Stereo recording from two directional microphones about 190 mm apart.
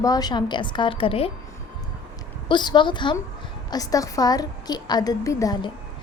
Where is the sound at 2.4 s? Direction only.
25° left (ahead or behind).